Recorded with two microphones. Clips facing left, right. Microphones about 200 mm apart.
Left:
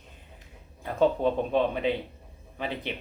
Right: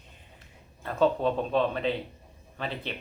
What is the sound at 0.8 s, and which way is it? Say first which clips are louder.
Speech: left 1 dB; 15° left (ahead or behind).